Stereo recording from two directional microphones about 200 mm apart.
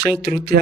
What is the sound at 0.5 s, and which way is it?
Speech, 55° right (ahead or behind).